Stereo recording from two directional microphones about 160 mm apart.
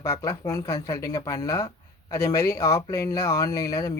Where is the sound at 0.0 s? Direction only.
20° left (ahead or behind).